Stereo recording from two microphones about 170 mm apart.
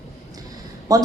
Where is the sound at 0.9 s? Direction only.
20° right (ahead or behind).